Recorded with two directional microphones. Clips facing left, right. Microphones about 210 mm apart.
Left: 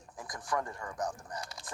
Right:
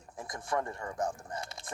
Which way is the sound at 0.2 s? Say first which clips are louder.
Right 2 dB; 25° right (ahead or behind).